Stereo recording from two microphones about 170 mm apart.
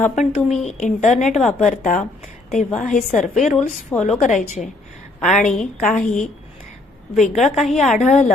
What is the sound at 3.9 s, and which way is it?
Speech, 10° left (ahead or behind).